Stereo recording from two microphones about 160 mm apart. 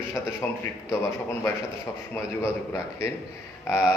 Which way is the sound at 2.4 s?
15° left (ahead or behind).